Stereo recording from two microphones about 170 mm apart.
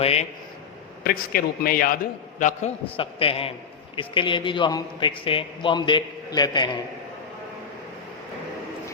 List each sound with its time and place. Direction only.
0.0 s a man's voice: 35° left (ahead or behind)
1.0 s a man's voice: 60° left (ahead or behind); by 6.7 s 25° left (ahead or behind)